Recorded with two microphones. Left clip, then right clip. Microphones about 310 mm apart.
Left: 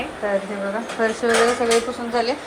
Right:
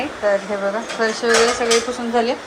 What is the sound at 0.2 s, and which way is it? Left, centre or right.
Speech, centre.